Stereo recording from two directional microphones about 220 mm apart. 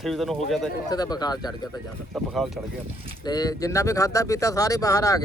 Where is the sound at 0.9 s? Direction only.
20° left (ahead or behind).